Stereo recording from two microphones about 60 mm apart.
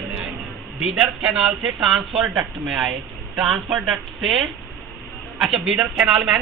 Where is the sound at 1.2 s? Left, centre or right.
Centre.